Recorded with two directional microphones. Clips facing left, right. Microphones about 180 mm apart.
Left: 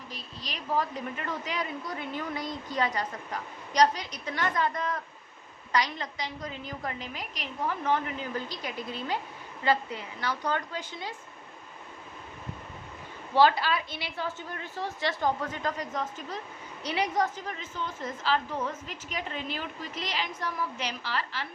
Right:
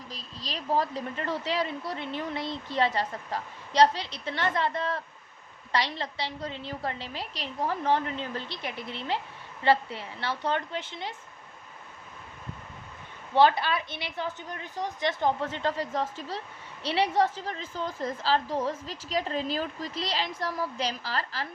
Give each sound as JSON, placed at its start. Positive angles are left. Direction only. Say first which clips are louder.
{"t": 0.3, "sound": "a woman's voice", "louder": "right 2 dB", "side_deg": -35}
{"t": 13.3, "sound": "a woman's voice", "louder": "right 1 dB", "side_deg": -20}